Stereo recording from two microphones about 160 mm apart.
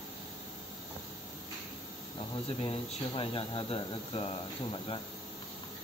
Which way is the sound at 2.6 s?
30° left (ahead or behind).